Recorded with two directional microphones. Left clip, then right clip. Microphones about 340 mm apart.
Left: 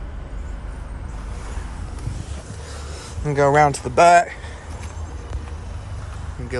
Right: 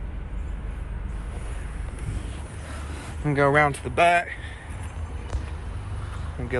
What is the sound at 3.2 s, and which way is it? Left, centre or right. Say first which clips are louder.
Speech: left 4 dB; centre.